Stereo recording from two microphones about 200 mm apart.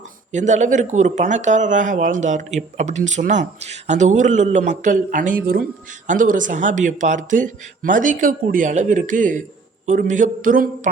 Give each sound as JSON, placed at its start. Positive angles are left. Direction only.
{"t": 0.3, "sound": "speech", "side_deg": -35}